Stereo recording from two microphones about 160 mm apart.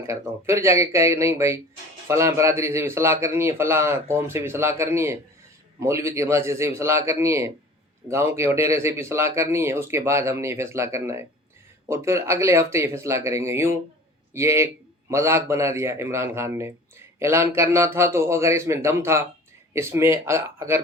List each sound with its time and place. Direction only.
0.1 s speech: 15° right (ahead or behind)